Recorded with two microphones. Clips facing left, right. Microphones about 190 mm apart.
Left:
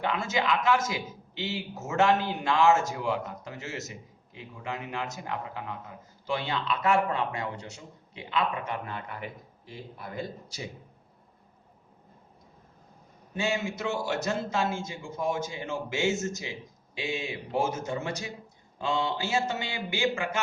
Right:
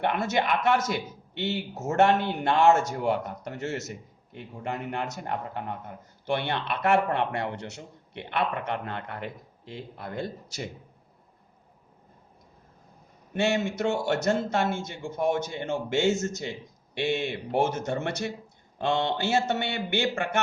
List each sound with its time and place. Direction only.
0.0 s a man's voice: 65° right (ahead or behind)
13.3 s a man's voice: 70° right (ahead or behind)